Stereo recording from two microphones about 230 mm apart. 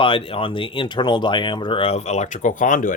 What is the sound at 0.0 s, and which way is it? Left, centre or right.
Speech, left.